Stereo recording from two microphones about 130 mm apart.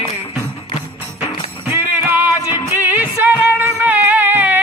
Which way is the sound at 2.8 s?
15° right (ahead or behind).